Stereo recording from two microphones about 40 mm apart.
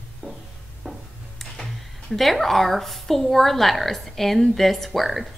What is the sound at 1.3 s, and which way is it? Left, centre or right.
Tick-tock, centre.